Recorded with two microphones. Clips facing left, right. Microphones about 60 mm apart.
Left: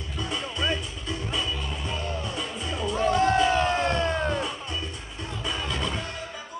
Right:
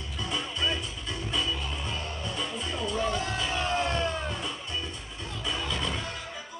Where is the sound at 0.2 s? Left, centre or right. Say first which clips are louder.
Left 2 dB; centre.